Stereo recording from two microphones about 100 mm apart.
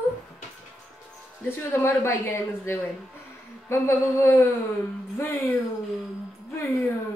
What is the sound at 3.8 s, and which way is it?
Speech, 20° left (ahead or behind).